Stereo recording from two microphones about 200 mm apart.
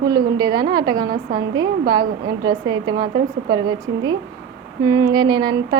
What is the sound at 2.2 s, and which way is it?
Speech, 50° right (ahead or behind).